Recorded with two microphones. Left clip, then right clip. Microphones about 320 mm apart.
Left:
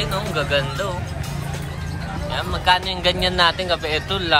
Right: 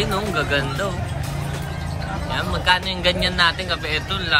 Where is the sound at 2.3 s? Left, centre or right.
Centre.